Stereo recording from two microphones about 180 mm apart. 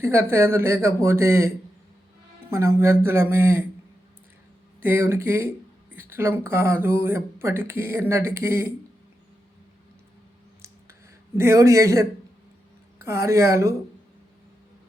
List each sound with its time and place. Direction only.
0.0 s speech: 15° right (ahead or behind)
4.8 s speech: 15° right (ahead or behind)
11.3 s speech: 15° right (ahead or behind)